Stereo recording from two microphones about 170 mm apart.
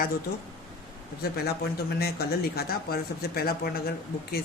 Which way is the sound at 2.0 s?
65° left (ahead or behind).